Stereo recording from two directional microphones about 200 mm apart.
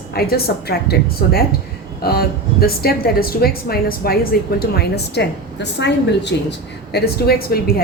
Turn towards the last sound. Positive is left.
turn(degrees=50)  # may be behind; listen again after turning